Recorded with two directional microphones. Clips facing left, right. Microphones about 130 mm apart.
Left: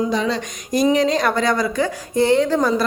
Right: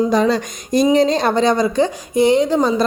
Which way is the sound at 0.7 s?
30° right (ahead or behind).